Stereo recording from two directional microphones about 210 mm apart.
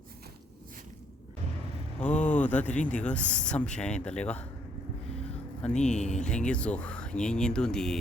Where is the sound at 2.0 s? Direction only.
5° left (ahead or behind).